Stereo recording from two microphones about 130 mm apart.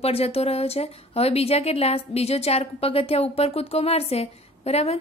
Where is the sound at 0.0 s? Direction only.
50° left (ahead or behind).